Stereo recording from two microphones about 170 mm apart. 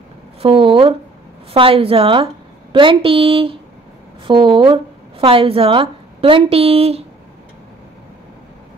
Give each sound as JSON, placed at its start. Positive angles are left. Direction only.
{"t": 0.4, "sound": "a woman's voice", "side_deg": -30}